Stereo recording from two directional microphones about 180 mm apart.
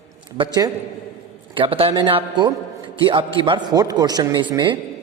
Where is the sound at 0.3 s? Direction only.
20° right (ahead or behind).